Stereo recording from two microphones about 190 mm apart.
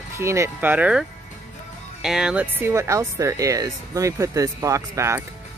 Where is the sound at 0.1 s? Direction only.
15° right (ahead or behind).